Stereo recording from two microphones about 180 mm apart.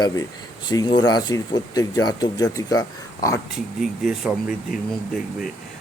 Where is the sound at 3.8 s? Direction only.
Centre (ahead or behind).